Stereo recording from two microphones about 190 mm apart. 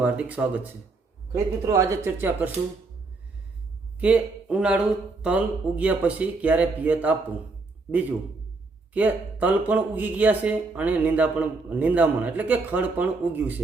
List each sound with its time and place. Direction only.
0.0 s speech: 10° right (ahead or behind)
4.0 s speech: 5° right (ahead or behind)
8.9 s speech: 10° right (ahead or behind)